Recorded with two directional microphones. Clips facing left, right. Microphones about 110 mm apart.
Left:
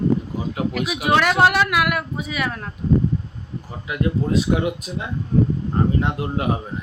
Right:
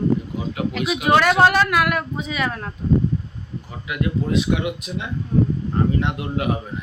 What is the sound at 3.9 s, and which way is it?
Speech, 35° left (ahead or behind).